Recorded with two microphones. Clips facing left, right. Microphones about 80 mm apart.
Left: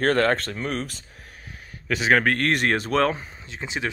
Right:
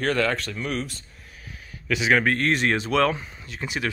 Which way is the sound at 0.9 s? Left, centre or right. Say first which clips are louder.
Left 1 dB; left.